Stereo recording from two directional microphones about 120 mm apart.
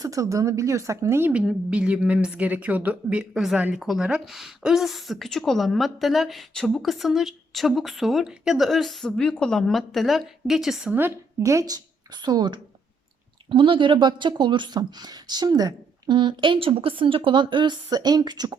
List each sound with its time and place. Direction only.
0.0 s speech: 25° right (ahead or behind)
1.3 s a woman's voice: 10° right (ahead or behind)
10.9 s a woman's voice: 20° right (ahead or behind); by 18.5 s 35° right (ahead or behind)